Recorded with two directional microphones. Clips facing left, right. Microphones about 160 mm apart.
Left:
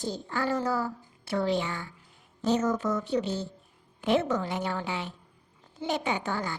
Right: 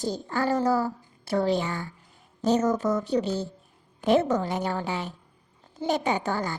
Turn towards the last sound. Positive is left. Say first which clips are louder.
# right 4 dB
turn(degrees=-40)  # may be behind; listen again after turning